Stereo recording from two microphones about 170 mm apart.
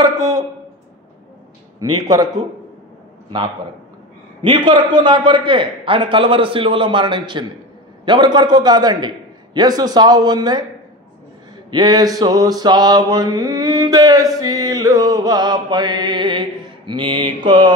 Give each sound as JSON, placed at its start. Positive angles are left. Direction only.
{"t": 0.0, "sound": "a sound", "side_deg": -20}
{"t": 1.8, "sound": "mantra", "side_deg": -20}
{"t": 4.4, "sound": "mantra", "side_deg": -30}
{"t": 11.7, "sound": "mantra", "side_deg": -25}